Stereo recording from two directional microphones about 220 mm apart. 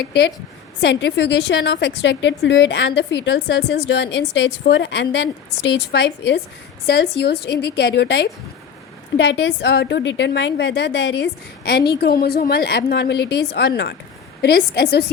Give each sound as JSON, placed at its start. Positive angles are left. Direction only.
{"t": 0.0, "sound": "a woman's voice", "side_deg": 50}